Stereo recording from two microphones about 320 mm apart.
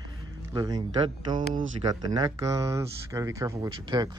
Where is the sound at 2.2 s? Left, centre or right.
Centre.